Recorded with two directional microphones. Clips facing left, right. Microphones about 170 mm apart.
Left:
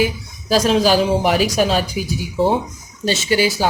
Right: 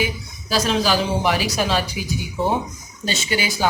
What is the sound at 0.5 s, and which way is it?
Speech, 45° left (ahead or behind).